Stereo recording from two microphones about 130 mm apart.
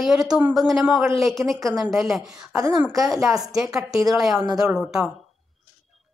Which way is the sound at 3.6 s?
Centre (ahead or behind).